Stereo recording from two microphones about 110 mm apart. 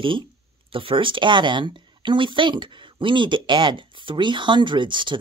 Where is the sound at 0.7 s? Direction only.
55° right (ahead or behind).